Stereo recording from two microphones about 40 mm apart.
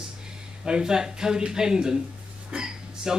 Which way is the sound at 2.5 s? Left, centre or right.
Centre.